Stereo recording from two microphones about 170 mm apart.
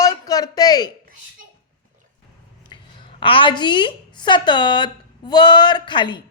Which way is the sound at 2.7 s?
25° left (ahead or behind).